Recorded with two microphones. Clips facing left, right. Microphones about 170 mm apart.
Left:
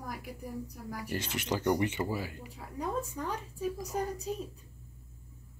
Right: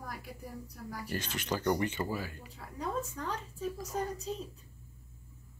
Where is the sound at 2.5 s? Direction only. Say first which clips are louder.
Left 1 dB; 10° left (ahead or behind).